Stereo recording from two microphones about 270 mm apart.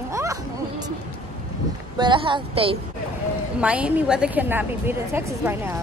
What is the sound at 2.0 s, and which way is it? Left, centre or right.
Speech, centre.